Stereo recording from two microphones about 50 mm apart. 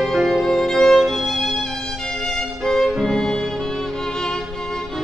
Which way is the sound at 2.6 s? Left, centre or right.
Centre.